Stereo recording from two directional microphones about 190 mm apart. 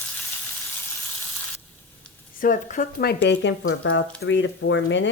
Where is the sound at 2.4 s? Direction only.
45° left (ahead or behind).